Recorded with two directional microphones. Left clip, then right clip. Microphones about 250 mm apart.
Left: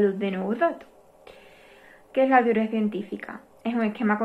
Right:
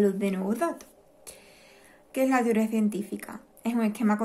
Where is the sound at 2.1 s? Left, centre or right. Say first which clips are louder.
Left 5 dB; right.